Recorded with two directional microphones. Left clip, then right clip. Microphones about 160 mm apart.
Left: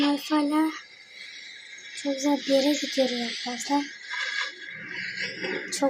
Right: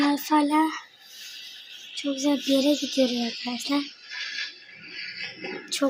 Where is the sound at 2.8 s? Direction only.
5° right (ahead or behind).